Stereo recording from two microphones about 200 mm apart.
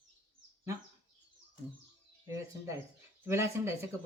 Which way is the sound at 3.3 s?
15° right (ahead or behind).